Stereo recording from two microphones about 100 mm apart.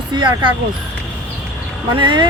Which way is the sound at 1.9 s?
50° right (ahead or behind).